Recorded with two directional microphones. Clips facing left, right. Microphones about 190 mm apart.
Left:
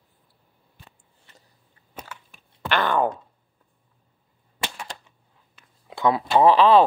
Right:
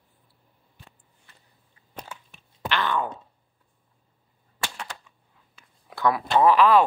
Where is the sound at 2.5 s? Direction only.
50° left (ahead or behind).